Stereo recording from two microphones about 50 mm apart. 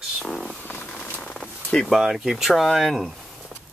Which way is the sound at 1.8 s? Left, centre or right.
Centre.